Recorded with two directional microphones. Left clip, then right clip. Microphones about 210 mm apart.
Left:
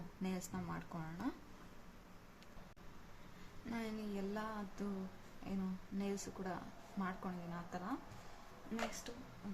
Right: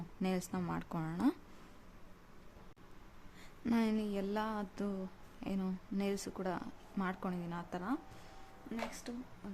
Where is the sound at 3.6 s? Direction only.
50° right (ahead or behind).